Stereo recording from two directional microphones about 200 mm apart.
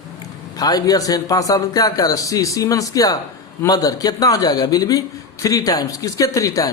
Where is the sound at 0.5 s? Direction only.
20° left (ahead or behind).